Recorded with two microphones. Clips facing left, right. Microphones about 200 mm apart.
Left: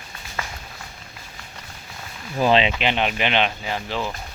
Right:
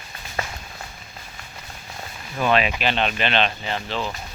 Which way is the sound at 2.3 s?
25° left (ahead or behind).